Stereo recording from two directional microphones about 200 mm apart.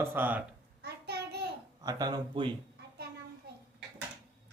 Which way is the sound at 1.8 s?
20° right (ahead or behind).